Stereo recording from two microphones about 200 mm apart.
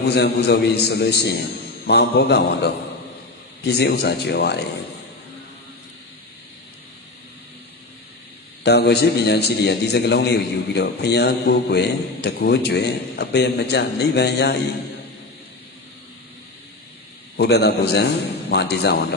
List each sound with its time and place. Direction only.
0.0 s a man's voice: 55° left (ahead or behind)
8.6 s a man's voice: 55° left (ahead or behind)
17.4 s a man's voice: 55° left (ahead or behind)